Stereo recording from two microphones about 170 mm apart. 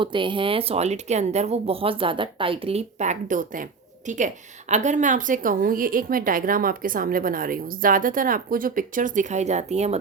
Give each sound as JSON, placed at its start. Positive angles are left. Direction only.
{"t": 0.0, "sound": "a woman's voice", "side_deg": -30}